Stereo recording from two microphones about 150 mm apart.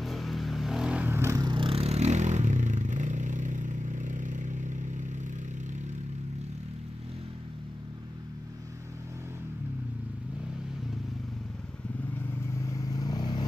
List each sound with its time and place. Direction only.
0.0 s vehicle: centre (ahead or behind); by 5.0 s 55° right (ahead or behind)
12.5 s vehicle: 20° left (ahead or behind)